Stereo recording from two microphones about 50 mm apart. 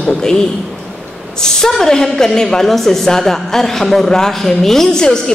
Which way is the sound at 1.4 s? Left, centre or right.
Centre.